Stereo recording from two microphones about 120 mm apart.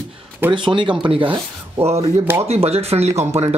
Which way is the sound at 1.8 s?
60° right (ahead or behind).